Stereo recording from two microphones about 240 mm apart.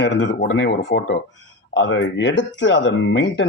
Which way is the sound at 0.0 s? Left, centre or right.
Left.